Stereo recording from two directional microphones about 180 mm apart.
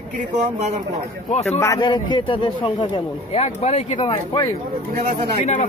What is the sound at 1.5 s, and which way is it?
A man's voice, 15° left (ahead or behind).